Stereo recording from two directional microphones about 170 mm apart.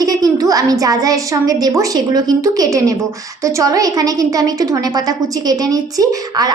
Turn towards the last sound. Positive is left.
turn(degrees=-20)  # may be behind; listen again after turning